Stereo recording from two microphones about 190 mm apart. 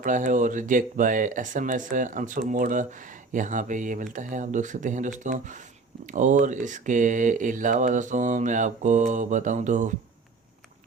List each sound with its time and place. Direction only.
0.0 s speech: 45° right (ahead or behind)